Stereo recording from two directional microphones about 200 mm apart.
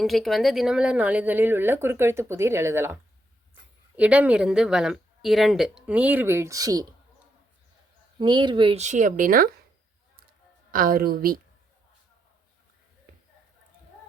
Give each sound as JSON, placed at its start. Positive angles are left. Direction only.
{"t": 0.0, "sound": "speech", "side_deg": 0}
{"t": 8.2, "sound": "speech", "side_deg": -20}
{"t": 10.7, "sound": "a woman's voice", "side_deg": -45}